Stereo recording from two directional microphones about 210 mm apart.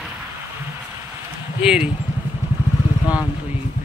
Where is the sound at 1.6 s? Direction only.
5° right (ahead or behind).